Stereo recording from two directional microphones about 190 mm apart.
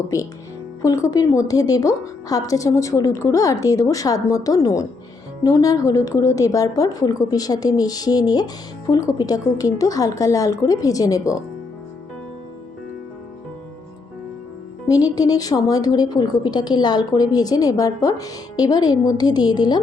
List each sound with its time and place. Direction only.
0.8 s a woman's voice: 15° left (ahead or behind)
14.8 s speech: 20° left (ahead or behind)